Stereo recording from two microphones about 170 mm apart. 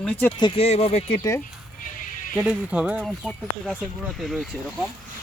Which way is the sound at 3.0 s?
5° left (ahead or behind).